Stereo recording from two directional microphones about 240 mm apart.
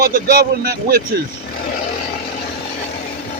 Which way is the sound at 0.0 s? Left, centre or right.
Right.